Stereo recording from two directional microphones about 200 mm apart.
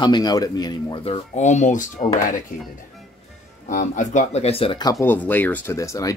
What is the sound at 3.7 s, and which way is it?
Speech, 40° left (ahead or behind).